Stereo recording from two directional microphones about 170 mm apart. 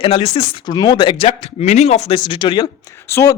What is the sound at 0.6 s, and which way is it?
Speech, 25° left (ahead or behind).